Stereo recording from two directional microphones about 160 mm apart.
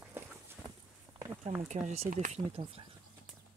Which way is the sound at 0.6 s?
5° right (ahead or behind).